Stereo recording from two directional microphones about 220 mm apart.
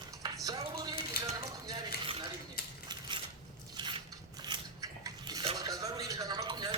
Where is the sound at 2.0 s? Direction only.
25° right (ahead or behind).